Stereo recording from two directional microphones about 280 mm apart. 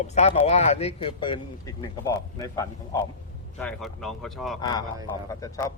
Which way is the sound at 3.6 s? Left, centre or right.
Centre.